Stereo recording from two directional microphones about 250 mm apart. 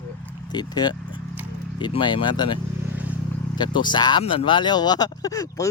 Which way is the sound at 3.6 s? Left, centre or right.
Centre.